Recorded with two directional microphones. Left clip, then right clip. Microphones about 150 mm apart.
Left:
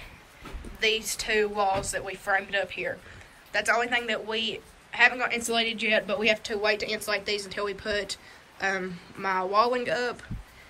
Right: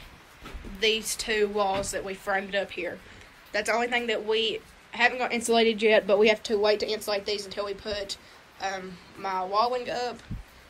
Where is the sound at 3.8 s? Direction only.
60° left (ahead or behind).